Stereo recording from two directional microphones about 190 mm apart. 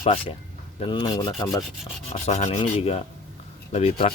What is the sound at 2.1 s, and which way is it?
Rub, 35° left (ahead or behind).